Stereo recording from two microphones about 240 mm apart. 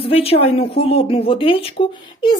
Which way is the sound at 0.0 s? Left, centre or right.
Left.